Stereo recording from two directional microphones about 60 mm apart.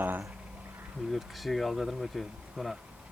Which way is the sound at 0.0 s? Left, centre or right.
Right.